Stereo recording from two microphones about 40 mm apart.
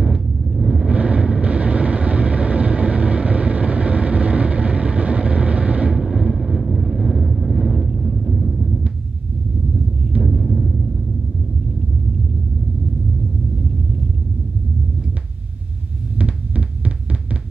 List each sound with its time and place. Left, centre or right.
0.8 s vehicle: right
5.9 s vehicle: centre
6.3 s vehicle: centre
10.2 s music: centre
16.2 s heart sounds: right